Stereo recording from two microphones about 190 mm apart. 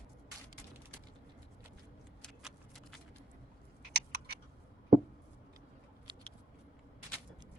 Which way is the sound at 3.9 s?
60° right (ahead or behind).